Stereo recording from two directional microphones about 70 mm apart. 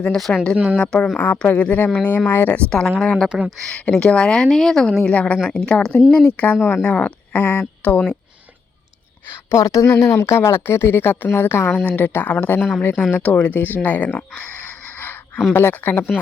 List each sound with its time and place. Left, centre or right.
0.5 s a woman's voice: centre
0.8 s a woman's voice: centre
1.1 s speech: left
2.6 s a woman's voice: centre
3.2 s a woman's voice: centre
3.8 s a woman's voice: centre
9.6 s a woman's voice: left
11.7 s speech: centre
15.5 s speech: left